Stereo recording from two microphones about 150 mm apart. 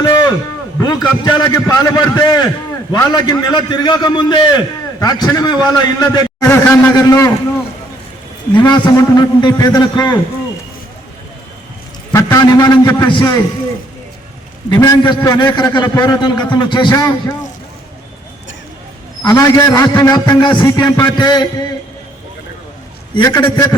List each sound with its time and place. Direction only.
0.0 s a sound: 25° left (ahead or behind)
0.8 s a man's voice: 25° left (ahead or behind)
6.4 s a man's voice: 10° left (ahead or behind)
6.9 s a man's voice: 25° left (ahead or behind)
8.5 s a man's voice: 30° left (ahead or behind)
12.1 s a man's voice: 20° left (ahead or behind)
14.8 s a man's voice: 15° left (ahead or behind)
15.2 s a man's voice: 25° left (ahead or behind)
19.2 s a man's voice: 25° left (ahead or behind)
23.1 s a man's voice: 25° left (ahead or behind)